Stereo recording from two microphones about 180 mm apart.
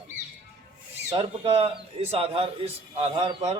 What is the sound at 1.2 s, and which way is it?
A man's voice, 30° right (ahead or behind).